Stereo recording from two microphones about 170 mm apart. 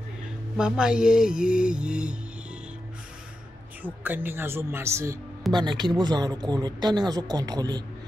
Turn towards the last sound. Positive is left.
turn(degrees=-25)  # may be behind; listen again after turning